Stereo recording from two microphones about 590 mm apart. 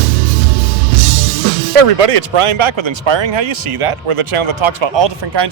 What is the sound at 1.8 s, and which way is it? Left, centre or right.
Speech, right.